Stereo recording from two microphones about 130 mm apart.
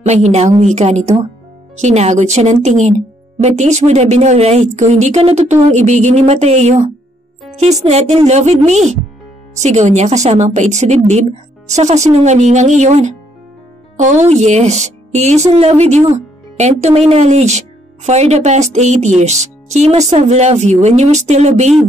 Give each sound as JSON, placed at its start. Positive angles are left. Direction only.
{"t": 0.0, "sound": "speech", "side_deg": -60}